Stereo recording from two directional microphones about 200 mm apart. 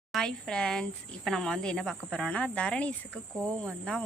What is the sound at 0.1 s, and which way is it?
Speech, 5° left (ahead or behind).